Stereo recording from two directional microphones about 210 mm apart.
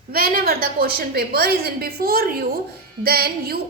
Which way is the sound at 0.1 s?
45° right (ahead or behind).